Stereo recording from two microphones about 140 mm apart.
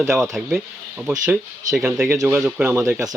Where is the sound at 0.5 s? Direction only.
10° right (ahead or behind).